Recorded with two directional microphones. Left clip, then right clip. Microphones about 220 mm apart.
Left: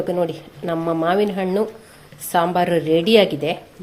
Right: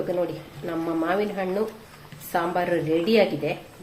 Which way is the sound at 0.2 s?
40° left (ahead or behind).